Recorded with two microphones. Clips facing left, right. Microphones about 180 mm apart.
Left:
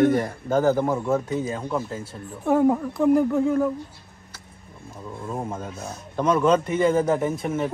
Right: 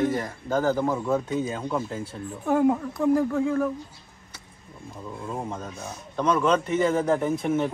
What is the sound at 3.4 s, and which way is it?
Speech, 20° left (ahead or behind).